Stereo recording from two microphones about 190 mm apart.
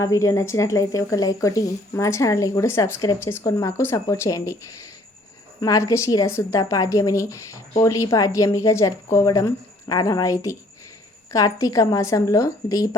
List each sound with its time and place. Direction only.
0.0 s speech: 15° left (ahead or behind)